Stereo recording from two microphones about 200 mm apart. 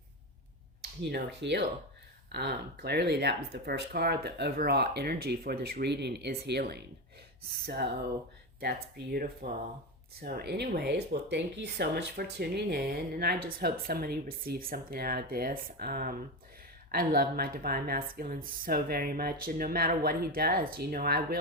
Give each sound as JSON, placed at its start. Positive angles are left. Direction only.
{"t": 1.1, "sound": "speech", "side_deg": -60}